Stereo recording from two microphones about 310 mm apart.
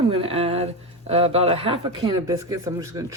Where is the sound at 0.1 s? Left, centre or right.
Centre.